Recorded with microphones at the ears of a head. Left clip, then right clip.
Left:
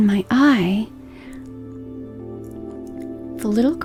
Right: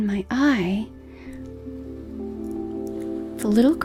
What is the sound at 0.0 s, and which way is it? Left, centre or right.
Speech, left.